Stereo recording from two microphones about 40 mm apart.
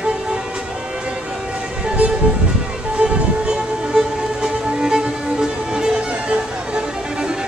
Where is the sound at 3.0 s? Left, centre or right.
Centre.